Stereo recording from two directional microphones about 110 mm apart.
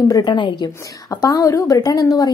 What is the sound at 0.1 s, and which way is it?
Speech, 45° left (ahead or behind).